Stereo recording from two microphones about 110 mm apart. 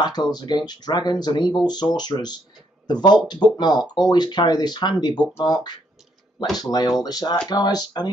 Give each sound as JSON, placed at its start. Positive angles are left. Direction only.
{"t": 0.0, "sound": "speech", "side_deg": 40}